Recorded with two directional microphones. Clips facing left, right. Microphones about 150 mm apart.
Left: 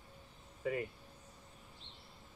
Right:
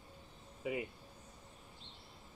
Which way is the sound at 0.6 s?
10° right (ahead or behind).